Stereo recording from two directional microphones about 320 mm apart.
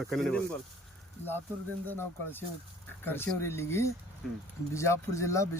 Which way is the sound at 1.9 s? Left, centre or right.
Centre.